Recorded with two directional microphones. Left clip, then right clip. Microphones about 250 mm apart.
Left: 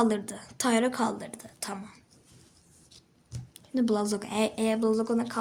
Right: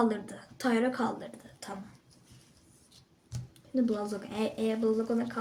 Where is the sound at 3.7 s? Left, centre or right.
Left.